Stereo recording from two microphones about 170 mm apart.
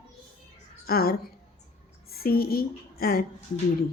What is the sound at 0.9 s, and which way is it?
A woman's voice, 60° left (ahead or behind).